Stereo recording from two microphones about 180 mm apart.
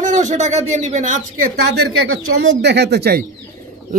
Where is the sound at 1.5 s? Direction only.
70° right (ahead or behind).